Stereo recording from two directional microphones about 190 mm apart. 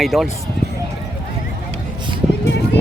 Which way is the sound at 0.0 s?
Centre (ahead or behind).